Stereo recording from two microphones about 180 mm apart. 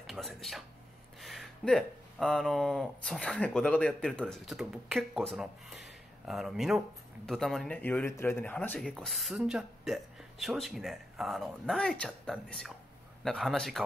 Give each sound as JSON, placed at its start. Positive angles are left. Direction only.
{"t": 0.1, "sound": "speech", "side_deg": 0}